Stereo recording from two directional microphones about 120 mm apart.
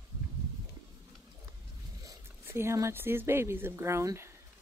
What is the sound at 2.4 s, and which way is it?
Speech, 20° right (ahead or behind).